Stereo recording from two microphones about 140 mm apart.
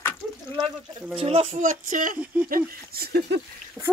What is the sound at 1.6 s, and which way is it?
Speech, 70° right (ahead or behind).